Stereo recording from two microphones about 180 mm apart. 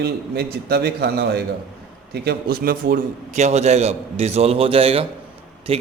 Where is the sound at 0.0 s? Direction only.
60° right (ahead or behind).